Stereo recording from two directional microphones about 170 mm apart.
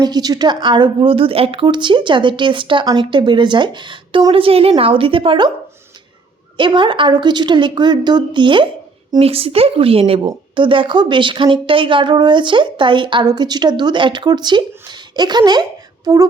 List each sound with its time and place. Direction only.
0.0 s a woman's voice: 25° right (ahead or behind)
6.6 s a woman's voice: 30° right (ahead or behind)